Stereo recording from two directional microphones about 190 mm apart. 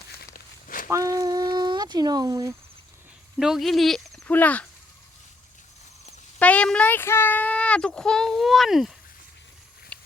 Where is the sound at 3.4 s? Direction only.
Centre (ahead or behind).